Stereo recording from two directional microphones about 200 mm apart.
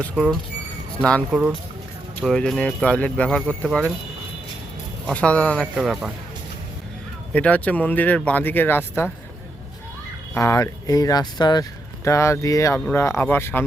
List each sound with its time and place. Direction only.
0.0 s speech: centre (ahead or behind)
5.0 s speech: 5° left (ahead or behind)
7.3 s speech: 5° left (ahead or behind)
10.3 s speech: 15° left (ahead or behind)